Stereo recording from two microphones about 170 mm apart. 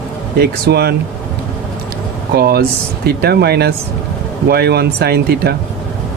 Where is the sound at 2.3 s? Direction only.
65° right (ahead or behind).